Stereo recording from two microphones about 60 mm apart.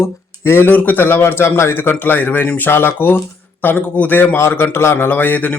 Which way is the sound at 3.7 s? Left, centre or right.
Left.